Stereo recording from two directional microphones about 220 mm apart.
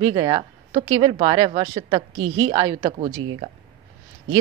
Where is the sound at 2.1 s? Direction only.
65° right (ahead or behind).